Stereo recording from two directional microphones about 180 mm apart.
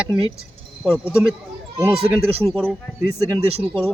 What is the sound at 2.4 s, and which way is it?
Speech, 5° left (ahead or behind).